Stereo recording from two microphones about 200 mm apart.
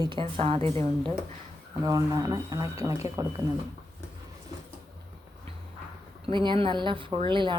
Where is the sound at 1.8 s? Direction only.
15° right (ahead or behind).